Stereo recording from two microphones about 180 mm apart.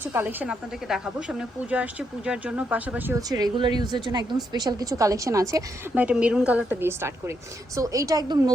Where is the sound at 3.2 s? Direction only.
20° right (ahead or behind).